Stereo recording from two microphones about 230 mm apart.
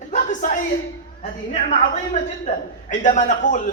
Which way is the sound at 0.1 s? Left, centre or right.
Left.